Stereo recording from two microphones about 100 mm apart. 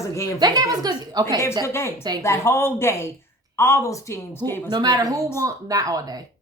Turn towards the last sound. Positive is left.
turn(degrees=-40)  # may be behind; listen again after turning